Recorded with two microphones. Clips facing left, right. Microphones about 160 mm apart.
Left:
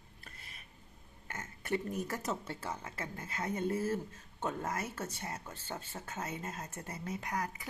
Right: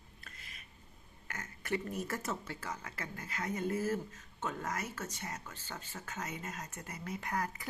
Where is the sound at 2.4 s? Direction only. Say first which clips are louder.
Left 2 dB; 30° left (ahead or behind).